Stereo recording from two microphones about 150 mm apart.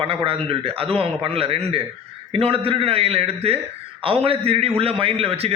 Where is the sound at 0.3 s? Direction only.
40° right (ahead or behind).